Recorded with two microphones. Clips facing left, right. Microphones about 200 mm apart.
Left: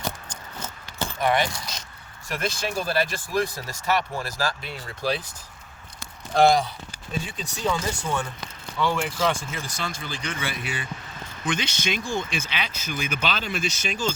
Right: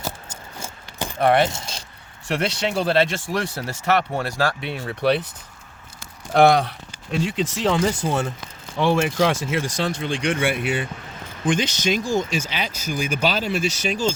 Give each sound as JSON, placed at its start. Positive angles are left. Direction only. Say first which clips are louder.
{"t": 0.0, "sound": "a sound", "louder": "right 1 dB", "side_deg": -10}
{"t": 1.2, "sound": "speech", "louder": "right 6 dB", "side_deg": -65}
{"t": 1.5, "sound": "speech", "louder": "right 3 dB", "side_deg": -25}
{"t": 2.2, "sound": "speech", "louder": "right 5 dB", "side_deg": -70}
{"t": 6.3, "sound": "speech", "louder": "right 3 dB", "side_deg": -65}
{"t": 11.4, "sound": "speech", "louder": "right 6 dB", "side_deg": -45}